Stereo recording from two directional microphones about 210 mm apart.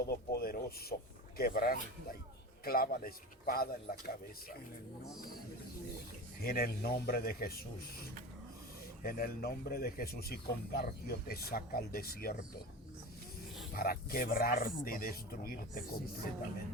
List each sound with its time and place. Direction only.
0.0 s speech: 45° left (ahead or behind)
6.4 s speech: 45° left (ahead or behind)
9.0 s speech: 45° left (ahead or behind)
13.7 s speech: 45° left (ahead or behind)